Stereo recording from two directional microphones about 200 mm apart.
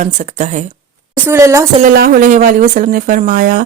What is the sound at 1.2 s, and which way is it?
Speech, 15° right (ahead or behind).